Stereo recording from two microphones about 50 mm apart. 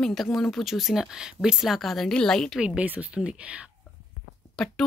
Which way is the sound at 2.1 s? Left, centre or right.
Centre.